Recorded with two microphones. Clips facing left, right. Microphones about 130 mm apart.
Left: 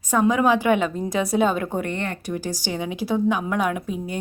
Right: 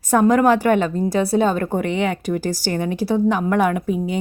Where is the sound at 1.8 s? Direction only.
75° right (ahead or behind).